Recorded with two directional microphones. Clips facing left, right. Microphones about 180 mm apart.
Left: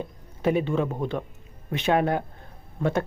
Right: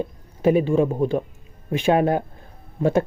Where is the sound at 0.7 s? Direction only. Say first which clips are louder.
Right 6 dB; 30° right (ahead or behind).